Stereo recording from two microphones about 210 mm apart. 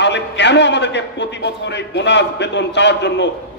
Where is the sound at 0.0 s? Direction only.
55° left (ahead or behind).